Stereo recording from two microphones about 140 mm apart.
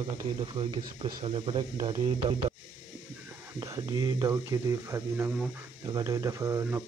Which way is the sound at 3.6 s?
25° right (ahead or behind).